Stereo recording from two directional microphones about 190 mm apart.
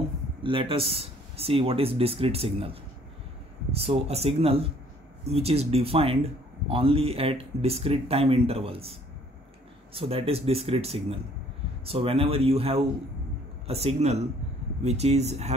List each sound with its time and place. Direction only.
0.4 s speech: 30° right (ahead or behind)
9.9 s speech: 30° right (ahead or behind)